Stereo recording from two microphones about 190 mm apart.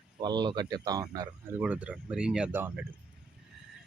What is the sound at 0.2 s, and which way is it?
Speech, 25° right (ahead or behind).